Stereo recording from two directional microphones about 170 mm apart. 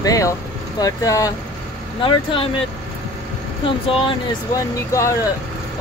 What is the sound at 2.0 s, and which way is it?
Speech, 30° left (ahead or behind).